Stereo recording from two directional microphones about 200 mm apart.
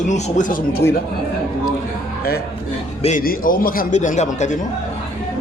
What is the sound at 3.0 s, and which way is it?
Speech, 40° left (ahead or behind).